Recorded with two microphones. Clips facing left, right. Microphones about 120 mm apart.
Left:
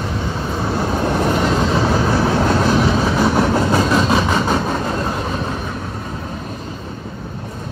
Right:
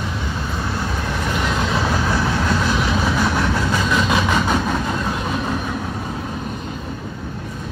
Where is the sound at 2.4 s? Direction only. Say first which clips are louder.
Left 5 dB; 35° left (ahead or behind).